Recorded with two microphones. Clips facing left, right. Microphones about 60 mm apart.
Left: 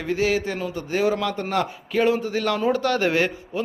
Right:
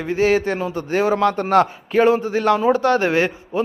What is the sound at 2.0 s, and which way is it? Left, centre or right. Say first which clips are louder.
A man's voice: right 5 dB; right.